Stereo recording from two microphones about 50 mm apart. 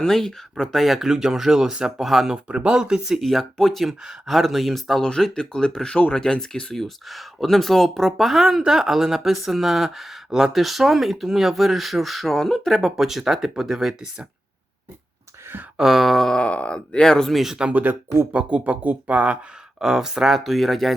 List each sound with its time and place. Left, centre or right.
0.0 s speech: centre
2.5 s speech: centre
3.2 s speech: centre
5.0 s speech: centre
15.8 s speech: centre
16.3 s speech: left
17.3 s speech: centre
18.3 s speech: right
19.8 s speech: centre